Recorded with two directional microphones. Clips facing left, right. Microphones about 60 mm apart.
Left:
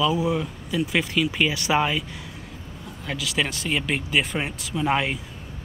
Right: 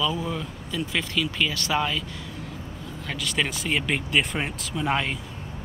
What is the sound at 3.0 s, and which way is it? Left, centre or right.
Speech, centre.